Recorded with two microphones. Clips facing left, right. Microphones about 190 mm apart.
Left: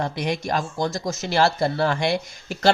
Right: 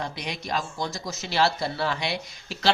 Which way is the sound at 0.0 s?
50° left (ahead or behind).